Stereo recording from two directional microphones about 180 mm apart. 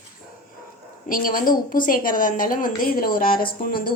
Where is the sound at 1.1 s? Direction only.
50° left (ahead or behind).